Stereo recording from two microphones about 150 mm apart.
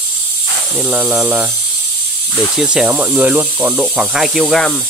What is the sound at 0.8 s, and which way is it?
Speech, 10° right (ahead or behind).